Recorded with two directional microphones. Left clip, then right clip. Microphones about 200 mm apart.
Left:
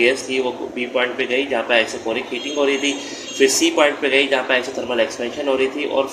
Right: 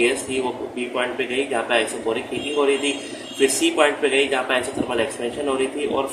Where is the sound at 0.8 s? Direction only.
15° left (ahead or behind).